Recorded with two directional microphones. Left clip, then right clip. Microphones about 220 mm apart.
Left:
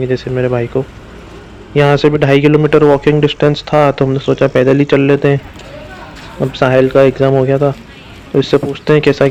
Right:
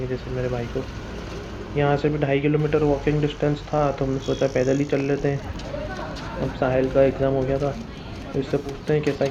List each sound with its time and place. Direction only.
0.1 s a man's voice: 50° left (ahead or behind)
1.7 s a man's voice: 55° left (ahead or behind)
6.6 s a man's voice: 50° left (ahead or behind)